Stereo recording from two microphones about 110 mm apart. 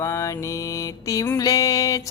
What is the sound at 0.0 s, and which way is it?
Mantra, 25° left (ahead or behind).